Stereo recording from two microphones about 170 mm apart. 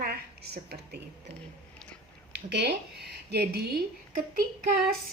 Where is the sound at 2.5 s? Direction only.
80° right.